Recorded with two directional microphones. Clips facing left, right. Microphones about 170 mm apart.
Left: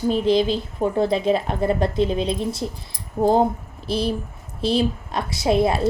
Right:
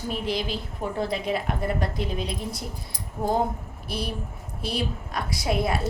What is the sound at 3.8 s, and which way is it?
A woman's voice, 30° left (ahead or behind).